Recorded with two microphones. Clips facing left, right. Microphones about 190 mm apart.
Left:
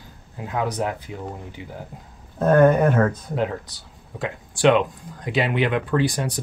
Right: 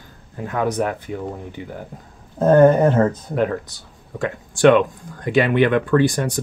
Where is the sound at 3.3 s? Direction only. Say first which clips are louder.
Right 4 dB; 55° right (ahead or behind).